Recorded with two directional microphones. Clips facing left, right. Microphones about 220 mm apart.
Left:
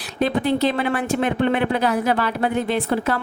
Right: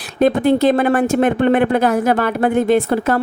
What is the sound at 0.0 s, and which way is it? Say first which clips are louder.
Speech: right 7 dB; 45° right (ahead or behind).